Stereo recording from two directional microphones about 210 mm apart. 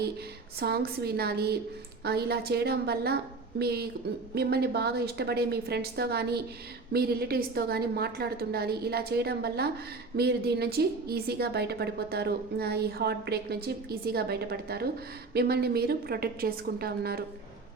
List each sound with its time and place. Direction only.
0.6 s a woman's voice: 50° right (ahead or behind)